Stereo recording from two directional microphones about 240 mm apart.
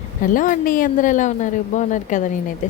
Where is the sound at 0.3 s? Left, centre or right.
Left.